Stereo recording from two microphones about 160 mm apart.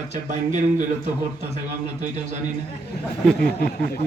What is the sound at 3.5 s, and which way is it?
Speech, 80° left.